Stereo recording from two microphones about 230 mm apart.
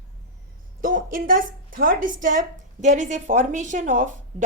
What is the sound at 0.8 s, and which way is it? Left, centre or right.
Speech, right.